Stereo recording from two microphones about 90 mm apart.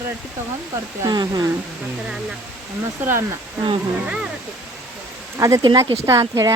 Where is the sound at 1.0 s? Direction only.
45° right (ahead or behind).